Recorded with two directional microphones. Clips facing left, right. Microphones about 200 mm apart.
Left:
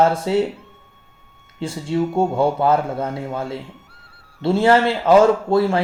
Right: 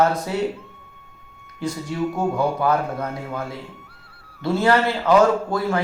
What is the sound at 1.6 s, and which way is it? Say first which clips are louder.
A man's voice: left 3 dB; 25° left (ahead or behind).